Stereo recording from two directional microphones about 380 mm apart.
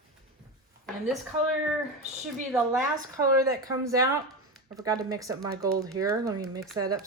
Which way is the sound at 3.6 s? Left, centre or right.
Centre.